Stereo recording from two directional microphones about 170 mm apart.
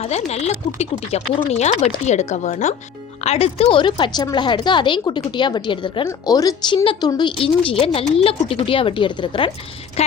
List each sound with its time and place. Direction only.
0.0 s a woman's voice: 40° left (ahead or behind)